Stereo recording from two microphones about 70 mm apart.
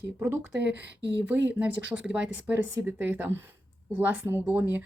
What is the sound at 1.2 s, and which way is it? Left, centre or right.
Speech, right.